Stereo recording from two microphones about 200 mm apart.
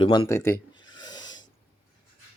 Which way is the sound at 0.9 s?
20° left (ahead or behind).